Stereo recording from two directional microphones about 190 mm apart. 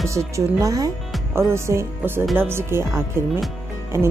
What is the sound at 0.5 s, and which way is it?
Speech, 15° right (ahead or behind).